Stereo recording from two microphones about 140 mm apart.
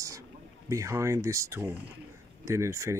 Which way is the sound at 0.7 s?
20° right (ahead or behind).